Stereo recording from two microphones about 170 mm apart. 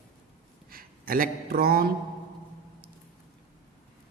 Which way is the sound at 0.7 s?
60° right (ahead or behind).